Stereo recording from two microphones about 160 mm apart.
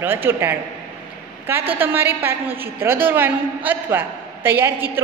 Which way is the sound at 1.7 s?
15° right (ahead or behind).